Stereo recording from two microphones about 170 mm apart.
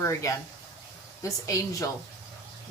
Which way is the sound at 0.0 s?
15° left (ahead or behind).